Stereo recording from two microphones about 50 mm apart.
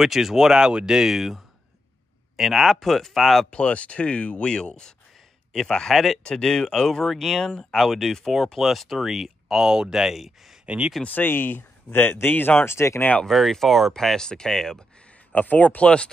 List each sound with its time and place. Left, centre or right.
0.0 s speech: centre
3.4 s speech: left; by 10.6 s centre
10.6 s a sound: right
11.1 s speech: left
12.6 s speech: left
13.3 s speech: centre
15.3 s speech: left